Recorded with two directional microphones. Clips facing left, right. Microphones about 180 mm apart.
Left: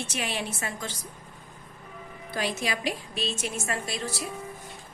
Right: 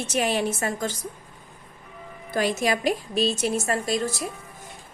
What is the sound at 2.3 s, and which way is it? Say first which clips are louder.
A woman's voice: right 7 dB; 45° right (ahead or behind).